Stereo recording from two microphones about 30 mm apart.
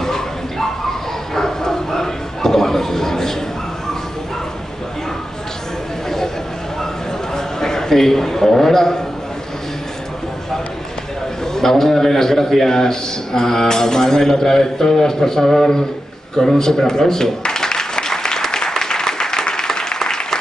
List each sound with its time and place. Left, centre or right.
0.0 s bow-wow: centre
6.0 s chatter: centre
7.3 s a sound: centre
11.5 s a man's voice: centre
16.3 s applause: centre